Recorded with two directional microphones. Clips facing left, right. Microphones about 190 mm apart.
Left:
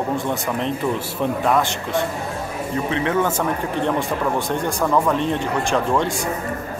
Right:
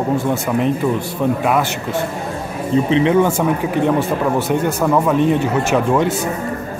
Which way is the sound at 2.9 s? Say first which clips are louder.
Right 6 dB; 20° right (ahead or behind).